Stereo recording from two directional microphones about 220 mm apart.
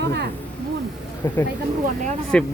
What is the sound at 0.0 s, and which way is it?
Speech, 50° right (ahead or behind).